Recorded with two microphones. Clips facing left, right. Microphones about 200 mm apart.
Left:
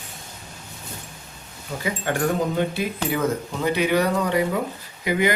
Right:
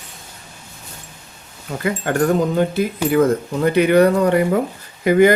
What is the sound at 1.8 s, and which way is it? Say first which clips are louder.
Speech: right 5 dB; 60° right (ahead or behind).